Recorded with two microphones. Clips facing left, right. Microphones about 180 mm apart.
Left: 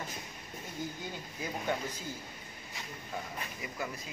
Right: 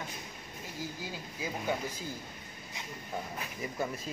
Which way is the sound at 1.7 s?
10° right (ahead or behind).